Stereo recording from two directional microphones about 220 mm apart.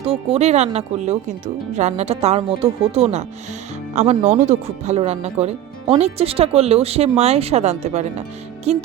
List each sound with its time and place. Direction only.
0.0 s speech: 25° right (ahead or behind)